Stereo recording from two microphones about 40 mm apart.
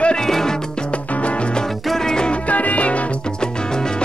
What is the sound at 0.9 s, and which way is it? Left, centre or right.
Music, left.